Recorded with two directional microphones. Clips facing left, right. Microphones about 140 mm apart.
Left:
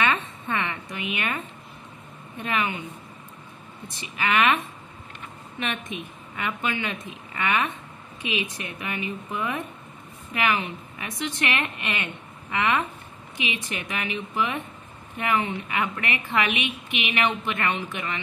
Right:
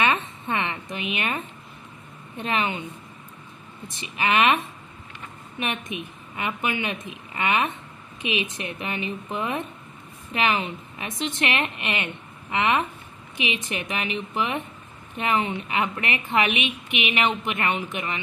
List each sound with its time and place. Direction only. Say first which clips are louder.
0.0 s a sound: right 1 dB; 20° right (ahead or behind)
2.3 s a woman's voice: right 1 dB; 25° right (ahead or behind)
4.0 s a woman's voice: right 1 dB; 20° right (ahead or behind)